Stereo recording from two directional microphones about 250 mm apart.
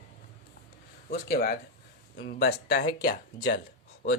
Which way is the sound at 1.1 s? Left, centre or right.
Left.